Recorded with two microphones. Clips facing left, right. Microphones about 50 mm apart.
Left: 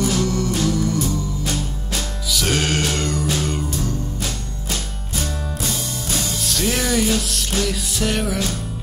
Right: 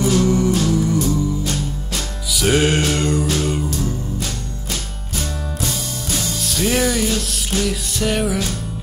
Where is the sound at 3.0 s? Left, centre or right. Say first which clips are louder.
Right 4 dB; centre.